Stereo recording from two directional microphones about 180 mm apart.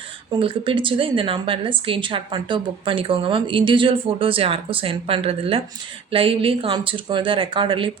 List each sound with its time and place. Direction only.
0.3 s speech: 30° right (ahead or behind)